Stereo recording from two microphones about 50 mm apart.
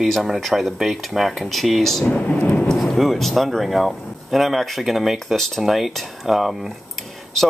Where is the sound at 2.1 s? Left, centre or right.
Left.